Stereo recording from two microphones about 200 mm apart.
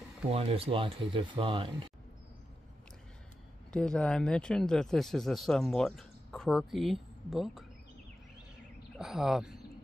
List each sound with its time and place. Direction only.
0.3 s speech: 30° right (ahead or behind)
3.7 s speech: 5° left (ahead or behind)
8.9 s speech: centre (ahead or behind)